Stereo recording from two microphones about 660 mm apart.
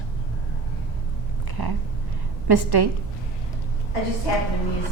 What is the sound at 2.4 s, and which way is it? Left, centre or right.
Speech, right.